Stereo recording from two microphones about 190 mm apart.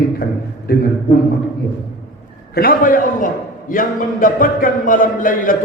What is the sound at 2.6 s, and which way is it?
A man's voice, 50° left (ahead or behind).